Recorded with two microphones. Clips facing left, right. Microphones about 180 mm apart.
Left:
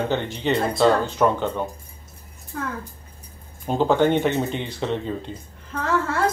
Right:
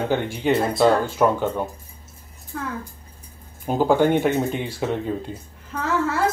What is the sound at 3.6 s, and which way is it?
Speech, 10° right (ahead or behind).